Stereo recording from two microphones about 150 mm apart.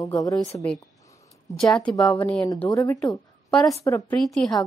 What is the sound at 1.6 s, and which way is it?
Speech, 5° left (ahead or behind).